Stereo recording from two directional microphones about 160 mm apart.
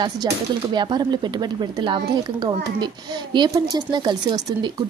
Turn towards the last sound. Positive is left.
turn(degrees=-25)  # may be behind; listen again after turning